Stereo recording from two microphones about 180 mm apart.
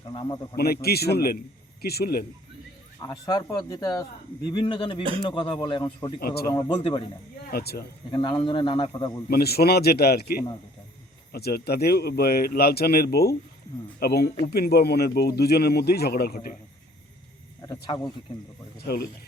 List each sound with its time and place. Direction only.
0.1 s speech: 25° left (ahead or behind)
0.5 s speech: 60° left (ahead or behind)
3.0 s speech: 20° left (ahead or behind)
6.1 s speech: 60° left (ahead or behind)
6.7 s speech: 25° left (ahead or behind)
7.5 s speech: 60° left (ahead or behind)
8.1 s speech: 25° left (ahead or behind)
9.3 s speech: 60° left (ahead or behind)
17.9 s speech: 20° left (ahead or behind)
18.8 s speech: 60° left (ahead or behind)